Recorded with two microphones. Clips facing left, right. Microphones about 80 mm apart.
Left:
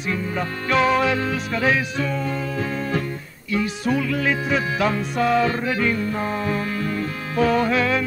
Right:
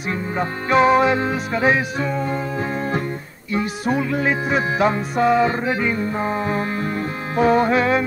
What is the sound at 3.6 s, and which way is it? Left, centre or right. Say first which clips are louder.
Music: right 1 dB; right.